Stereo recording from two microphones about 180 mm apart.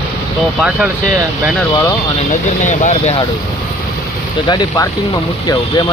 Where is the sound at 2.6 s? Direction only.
45° left (ahead or behind).